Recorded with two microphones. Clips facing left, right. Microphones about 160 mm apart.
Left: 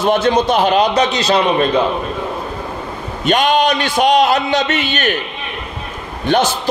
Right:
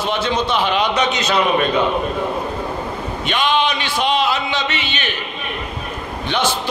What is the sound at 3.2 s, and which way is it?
A man's voice, 45° left (ahead or behind).